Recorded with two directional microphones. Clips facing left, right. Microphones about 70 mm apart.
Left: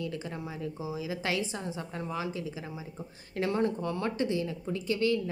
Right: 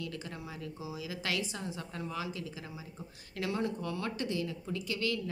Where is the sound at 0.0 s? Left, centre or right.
Left.